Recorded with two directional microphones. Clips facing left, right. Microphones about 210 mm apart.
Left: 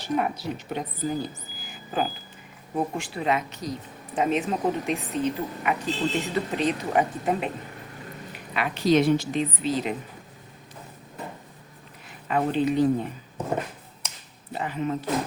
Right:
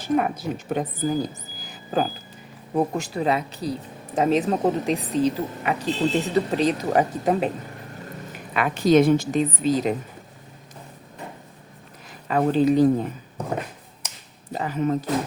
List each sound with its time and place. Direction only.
0.0 s speech: 45° right (ahead or behind)
8.3 s a woman's voice: 50° right (ahead or behind)
12.3 s speech: 40° right (ahead or behind)
14.5 s speech: 40° right (ahead or behind)